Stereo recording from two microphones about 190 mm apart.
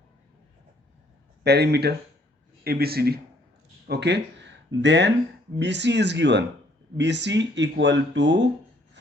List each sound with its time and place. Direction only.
1.5 s speech: 60° right (ahead or behind)